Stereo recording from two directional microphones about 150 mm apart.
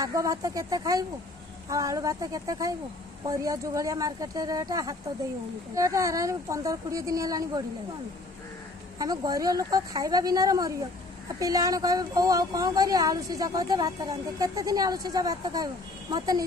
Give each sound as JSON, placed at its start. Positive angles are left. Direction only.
{"t": 0.0, "sound": "speech", "side_deg": -20}
{"t": 8.9, "sound": "speech", "side_deg": -25}